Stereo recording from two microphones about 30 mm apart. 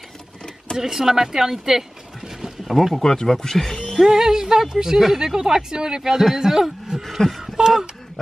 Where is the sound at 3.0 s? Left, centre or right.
Left.